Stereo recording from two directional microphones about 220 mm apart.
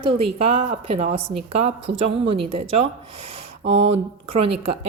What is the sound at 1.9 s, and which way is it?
Speech, 55° right (ahead or behind).